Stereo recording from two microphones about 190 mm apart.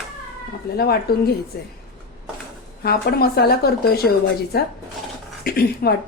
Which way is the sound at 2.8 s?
55° left (ahead or behind).